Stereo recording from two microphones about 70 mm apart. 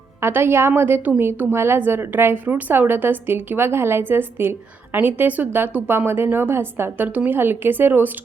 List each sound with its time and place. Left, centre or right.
0.2 s a woman's voice: right